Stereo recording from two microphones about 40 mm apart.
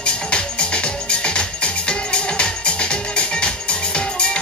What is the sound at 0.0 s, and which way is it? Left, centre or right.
Music, left.